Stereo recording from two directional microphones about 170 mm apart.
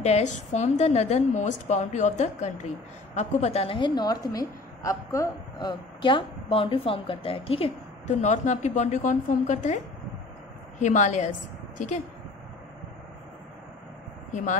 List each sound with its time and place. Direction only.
0.0 s a woman's voice: 40° left (ahead or behind)
8.2 s a woman's voice: 45° left (ahead or behind)
10.8 s a woman's voice: 45° left (ahead or behind)
14.3 s speech: 45° left (ahead or behind)